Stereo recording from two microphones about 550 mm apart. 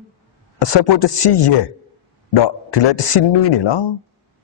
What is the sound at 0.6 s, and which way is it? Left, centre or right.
A man's voice, left.